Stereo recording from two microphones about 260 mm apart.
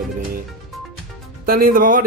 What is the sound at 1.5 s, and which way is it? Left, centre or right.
Speech, right.